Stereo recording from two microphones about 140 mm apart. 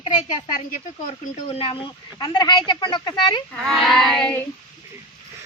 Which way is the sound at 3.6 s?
Centre (ahead or behind).